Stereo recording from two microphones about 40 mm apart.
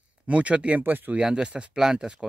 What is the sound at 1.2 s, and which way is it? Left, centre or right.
Speech, right.